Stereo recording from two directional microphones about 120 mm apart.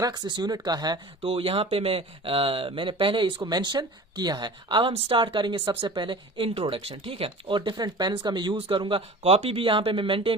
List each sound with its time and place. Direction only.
0.0 s speech: 35° right (ahead or behind)
1.2 s speech: 50° right (ahead or behind)